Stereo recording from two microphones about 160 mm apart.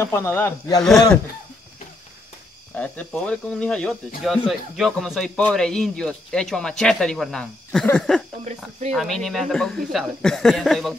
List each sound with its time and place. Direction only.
0.0 s speech: 15° left (ahead or behind)
2.7 s speech: 10° left (ahead or behind)